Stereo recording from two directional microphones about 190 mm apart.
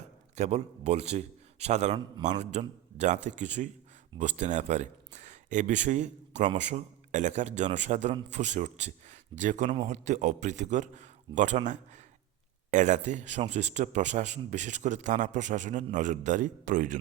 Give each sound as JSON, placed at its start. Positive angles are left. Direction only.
{"t": 0.3, "sound": "speech", "side_deg": -35}